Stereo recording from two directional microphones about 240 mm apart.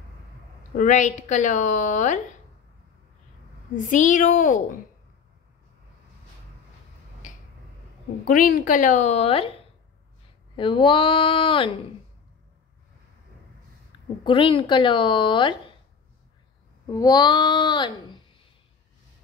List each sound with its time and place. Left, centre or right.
0.7 s a woman's voice: left
3.7 s a woman's voice: left
8.3 s a woman's voice: left
10.5 s a woman's voice: left
14.2 s a woman's voice: left
16.9 s a woman's voice: centre